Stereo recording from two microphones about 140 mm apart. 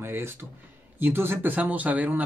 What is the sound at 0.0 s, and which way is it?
Speech, 15° right (ahead or behind).